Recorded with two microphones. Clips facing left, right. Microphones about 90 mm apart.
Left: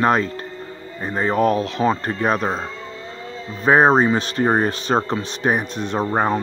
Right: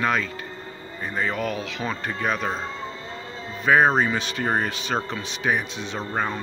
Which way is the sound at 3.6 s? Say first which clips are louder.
Left 4 dB; 35° left (ahead or behind).